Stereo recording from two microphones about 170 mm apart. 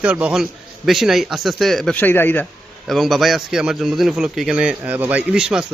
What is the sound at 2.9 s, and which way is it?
A man's voice, centre (ahead or behind).